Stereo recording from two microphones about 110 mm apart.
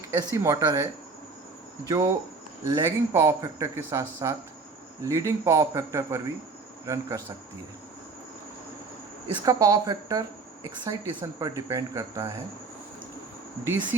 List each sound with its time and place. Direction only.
0.3 s speech: 30° right (ahead or behind)
1.9 s speech: 25° right (ahead or behind)
9.4 s speech: 30° right (ahead or behind)